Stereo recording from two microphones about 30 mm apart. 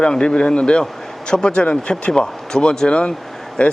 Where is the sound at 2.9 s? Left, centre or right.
Left.